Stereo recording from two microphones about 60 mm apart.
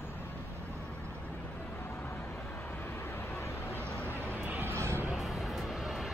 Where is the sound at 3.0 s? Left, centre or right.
Left.